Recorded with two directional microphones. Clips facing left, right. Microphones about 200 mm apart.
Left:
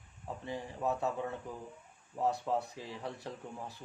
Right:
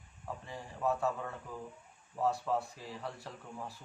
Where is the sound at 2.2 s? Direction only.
20° left (ahead or behind).